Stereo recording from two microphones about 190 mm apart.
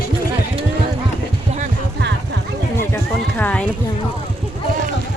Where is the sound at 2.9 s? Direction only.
10° left (ahead or behind).